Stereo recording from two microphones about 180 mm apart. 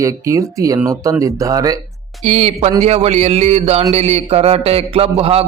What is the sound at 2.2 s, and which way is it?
A man's voice, 35° right (ahead or behind).